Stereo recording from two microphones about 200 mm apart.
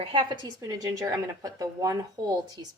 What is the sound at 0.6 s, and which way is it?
Speech, 15° right (ahead or behind).